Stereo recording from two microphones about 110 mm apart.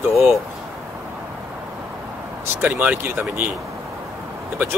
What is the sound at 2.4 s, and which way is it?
Speech, 15° right (ahead or behind).